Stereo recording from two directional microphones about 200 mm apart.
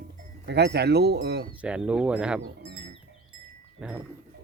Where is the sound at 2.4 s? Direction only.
50° right (ahead or behind).